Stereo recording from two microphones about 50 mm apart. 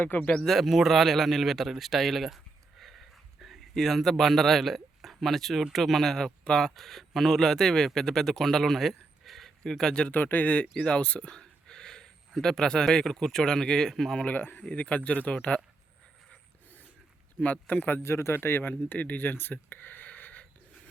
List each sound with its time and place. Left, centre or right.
0.2 s speech: left
0.4 s a man's voice: centre
10.1 s speech: left; by 14.2 s centre
14.2 s speech: left
17.4 s speech: left
18.0 s speech: left
18.9 s a sound: left